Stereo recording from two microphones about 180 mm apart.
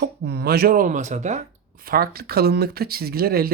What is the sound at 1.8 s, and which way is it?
Speech, 55° right (ahead or behind).